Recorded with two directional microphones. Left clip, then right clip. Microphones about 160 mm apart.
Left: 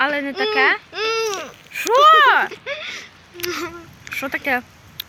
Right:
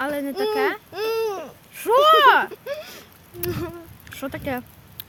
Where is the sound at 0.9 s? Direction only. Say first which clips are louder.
Left 3 dB; 50° right (ahead or behind).